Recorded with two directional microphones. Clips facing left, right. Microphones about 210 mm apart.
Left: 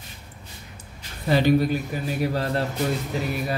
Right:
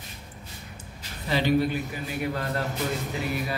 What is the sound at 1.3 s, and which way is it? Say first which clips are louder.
Speech: left 4 dB; 45° left (ahead or behind).